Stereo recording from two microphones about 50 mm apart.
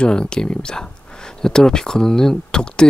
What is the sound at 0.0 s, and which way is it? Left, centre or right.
Speech, centre.